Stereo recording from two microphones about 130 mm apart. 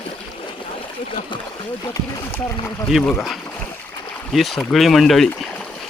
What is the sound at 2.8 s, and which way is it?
Speech, 5° left (ahead or behind).